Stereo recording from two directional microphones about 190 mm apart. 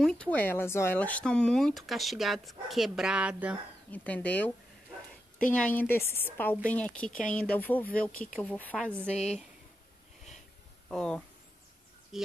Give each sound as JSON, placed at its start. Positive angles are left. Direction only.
{"t": 0.0, "sound": "speech", "side_deg": 5}
{"t": 3.9, "sound": "a woman's voice", "side_deg": 5}
{"t": 5.5, "sound": "a woman's voice", "side_deg": 5}
{"t": 9.1, "sound": "speech", "side_deg": 35}
{"t": 10.9, "sound": "speech", "side_deg": 5}